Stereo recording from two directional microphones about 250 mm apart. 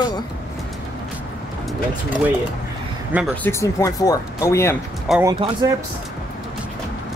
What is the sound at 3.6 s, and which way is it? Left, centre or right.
Speech, centre.